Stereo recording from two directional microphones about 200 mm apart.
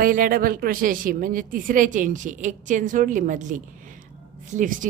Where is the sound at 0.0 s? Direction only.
45° right (ahead or behind).